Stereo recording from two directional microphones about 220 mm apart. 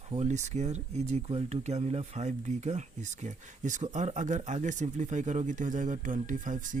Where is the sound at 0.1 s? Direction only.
30° right (ahead or behind).